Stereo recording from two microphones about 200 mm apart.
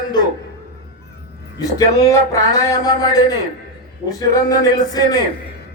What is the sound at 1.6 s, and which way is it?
Speech, 15° left (ahead or behind).